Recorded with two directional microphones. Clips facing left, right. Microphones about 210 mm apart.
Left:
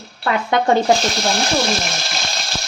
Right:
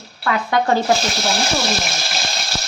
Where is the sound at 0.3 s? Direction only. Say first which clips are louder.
Left 1 dB; 25° left (ahead or behind).